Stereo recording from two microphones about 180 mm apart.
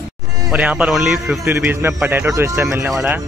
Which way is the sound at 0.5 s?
5° right (ahead or behind).